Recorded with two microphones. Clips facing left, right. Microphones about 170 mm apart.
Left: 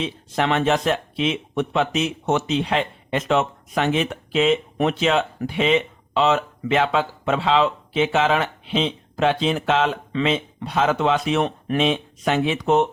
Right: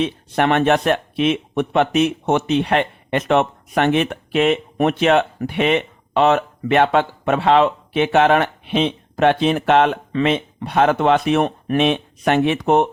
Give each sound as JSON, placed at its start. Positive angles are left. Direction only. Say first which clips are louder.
{"t": 0.0, "sound": "speech", "louder": "right 5 dB", "side_deg": -60}